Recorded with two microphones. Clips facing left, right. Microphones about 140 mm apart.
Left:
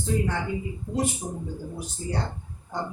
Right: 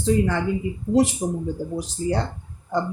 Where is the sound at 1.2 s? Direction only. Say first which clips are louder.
Right 9 dB; 80° right.